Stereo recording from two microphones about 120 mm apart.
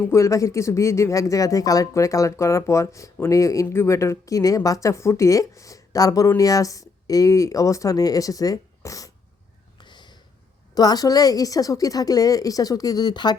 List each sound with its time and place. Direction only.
0.0 s speech: 25° left (ahead or behind)
9.7 s a sound: 40° left (ahead or behind)
10.8 s a woman's voice: 30° left (ahead or behind)